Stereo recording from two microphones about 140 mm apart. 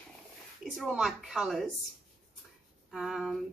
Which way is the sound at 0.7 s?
Centre (ahead or behind).